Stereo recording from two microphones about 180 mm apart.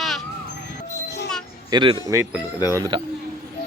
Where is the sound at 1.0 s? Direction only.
70° left (ahead or behind).